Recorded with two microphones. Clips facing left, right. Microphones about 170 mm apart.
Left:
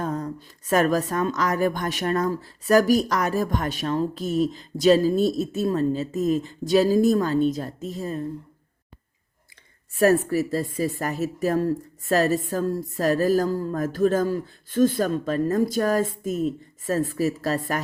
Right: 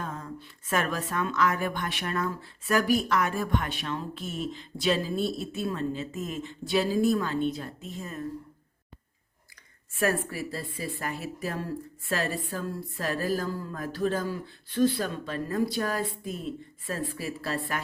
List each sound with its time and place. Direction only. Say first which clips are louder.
0.0 s a woman's voice: left 9 dB; 40° left (ahead or behind)
9.9 s a woman's voice: left 9 dB; 40° left (ahead or behind)